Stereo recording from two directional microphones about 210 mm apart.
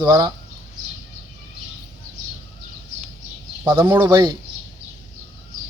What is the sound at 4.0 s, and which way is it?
Speech, 20° right (ahead or behind).